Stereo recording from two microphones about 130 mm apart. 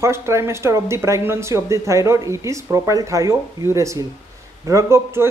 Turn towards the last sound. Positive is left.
turn(degrees=-20)  # may be behind; listen again after turning